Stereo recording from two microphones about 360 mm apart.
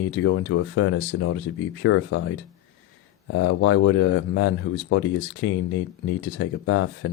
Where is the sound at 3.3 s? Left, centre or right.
Left.